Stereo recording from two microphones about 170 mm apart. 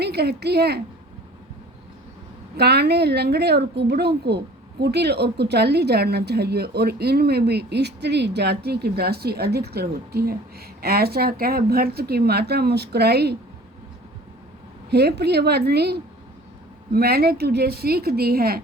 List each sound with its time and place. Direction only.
0.0 s a woman's voice: 70° right (ahead or behind)
2.6 s a woman's voice: 70° right (ahead or behind)
14.8 s a woman's voice: 70° right (ahead or behind)